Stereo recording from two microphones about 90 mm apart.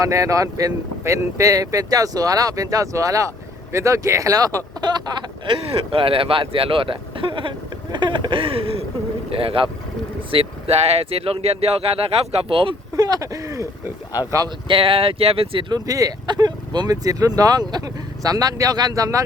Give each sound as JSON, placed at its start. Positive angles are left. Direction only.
{"t": 0.0, "sound": "speech", "side_deg": -35}
{"t": 5.5, "sound": "speech", "side_deg": -85}
{"t": 7.9, "sound": "speech", "side_deg": -60}
{"t": 13.0, "sound": "speech", "side_deg": -45}
{"t": 14.4, "sound": "speech", "side_deg": -70}
{"t": 15.7, "sound": "speech", "side_deg": -40}